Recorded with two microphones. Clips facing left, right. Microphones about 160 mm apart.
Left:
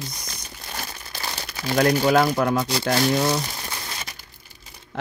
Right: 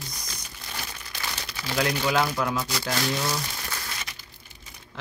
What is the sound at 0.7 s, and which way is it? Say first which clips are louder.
Crumpling: left 3 dB; 35° left (ahead or behind).